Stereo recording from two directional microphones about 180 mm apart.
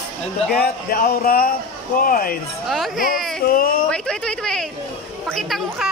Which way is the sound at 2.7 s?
Centre (ahead or behind).